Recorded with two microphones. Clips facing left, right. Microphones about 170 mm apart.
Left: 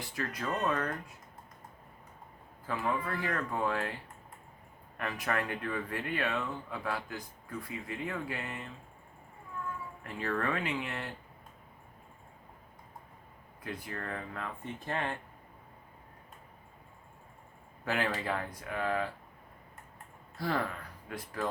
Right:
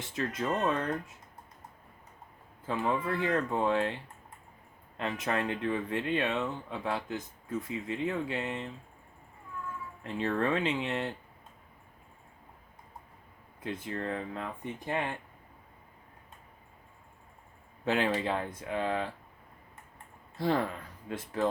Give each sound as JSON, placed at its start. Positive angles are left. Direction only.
{"t": 0.0, "sound": "speech", "side_deg": -25}
{"t": 2.6, "sound": "speech", "side_deg": -25}
{"t": 4.9, "sound": "speech", "side_deg": -20}
{"t": 10.0, "sound": "speech", "side_deg": -25}
{"t": 13.6, "sound": "speech", "side_deg": -25}
{"t": 17.8, "sound": "speech", "side_deg": -20}
{"t": 20.3, "sound": "speech", "side_deg": -25}